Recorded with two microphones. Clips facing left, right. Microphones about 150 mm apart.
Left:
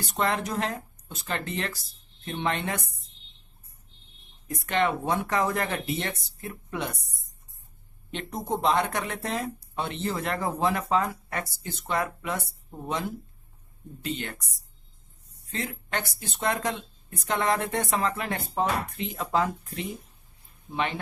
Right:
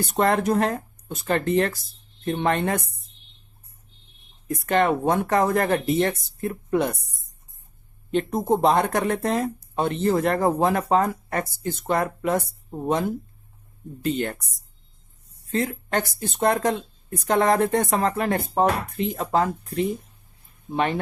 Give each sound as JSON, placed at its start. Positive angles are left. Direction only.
{"t": 0.0, "sound": "speech", "side_deg": -50}
{"t": 4.4, "sound": "speech", "side_deg": -45}
{"t": 8.1, "sound": "speech", "side_deg": -50}
{"t": 15.5, "sound": "speech", "side_deg": -45}